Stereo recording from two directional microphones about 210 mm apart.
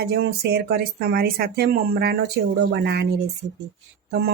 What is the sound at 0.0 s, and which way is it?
A woman's voice, 50° right (ahead or behind).